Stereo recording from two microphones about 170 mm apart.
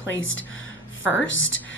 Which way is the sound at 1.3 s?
90° left.